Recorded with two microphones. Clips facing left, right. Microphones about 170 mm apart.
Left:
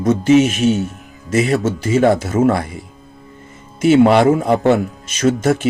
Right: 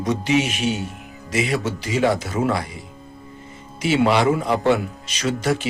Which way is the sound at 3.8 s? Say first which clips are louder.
Left 7 dB; 50° left (ahead or behind).